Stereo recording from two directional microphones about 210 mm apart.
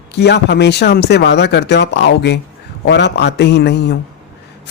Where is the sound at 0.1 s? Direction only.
55° left (ahead or behind).